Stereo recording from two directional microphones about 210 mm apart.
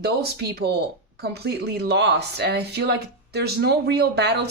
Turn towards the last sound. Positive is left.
turn(degrees=-50)  # may be behind; listen again after turning